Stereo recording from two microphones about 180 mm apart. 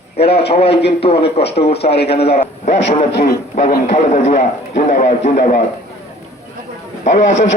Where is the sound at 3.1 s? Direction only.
65° left (ahead or behind).